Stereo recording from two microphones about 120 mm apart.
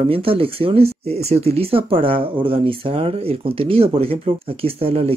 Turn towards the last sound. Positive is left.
turn(degrees=-55)  # may be behind; listen again after turning